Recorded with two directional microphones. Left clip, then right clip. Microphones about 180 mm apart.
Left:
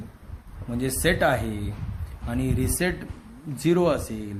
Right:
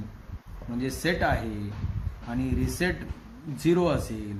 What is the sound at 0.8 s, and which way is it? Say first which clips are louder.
Speech: left 4 dB; 55° left (ahead or behind).